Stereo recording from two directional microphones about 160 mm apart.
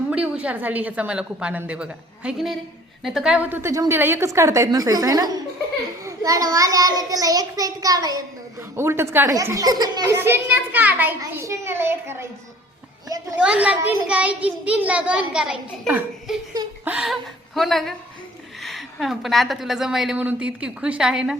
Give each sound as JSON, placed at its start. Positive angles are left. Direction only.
{"t": 0.1, "sound": "a child's voice", "side_deg": -10}
{"t": 10.2, "sound": "a child's voice", "side_deg": -10}
{"t": 13.4, "sound": "a child's voice", "side_deg": -5}